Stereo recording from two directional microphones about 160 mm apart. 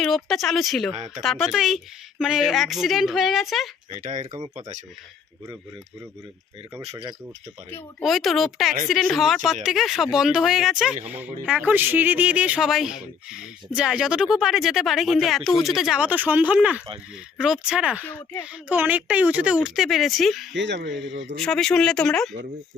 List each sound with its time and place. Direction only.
0.0 s speech: centre (ahead or behind)
0.9 s speech: 40° right (ahead or behind)
1.2 s speech: centre (ahead or behind)
4.2 s speech: 30° right (ahead or behind)
6.7 s speech: 20° right (ahead or behind)
8.0 s speech: centre (ahead or behind)
18.0 s speech: 10° left (ahead or behind)
18.7 s speech: 10° right (ahead or behind)
20.5 s speech: 90° right
21.4 s speech: 5° left (ahead or behind)